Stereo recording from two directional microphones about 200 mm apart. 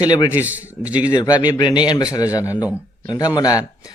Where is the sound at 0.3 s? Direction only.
10° right (ahead or behind).